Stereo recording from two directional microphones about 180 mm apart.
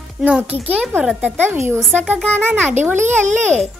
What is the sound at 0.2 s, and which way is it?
A woman's voice, 10° right (ahead or behind).